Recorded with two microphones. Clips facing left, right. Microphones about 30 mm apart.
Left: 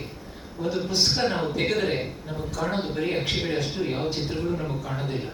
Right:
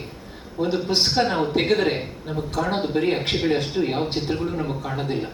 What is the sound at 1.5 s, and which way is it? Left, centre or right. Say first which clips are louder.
Speech: right 4 dB; right.